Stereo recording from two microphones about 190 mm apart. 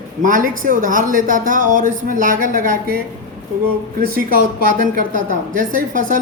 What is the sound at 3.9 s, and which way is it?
Speech, 50° right (ahead or behind).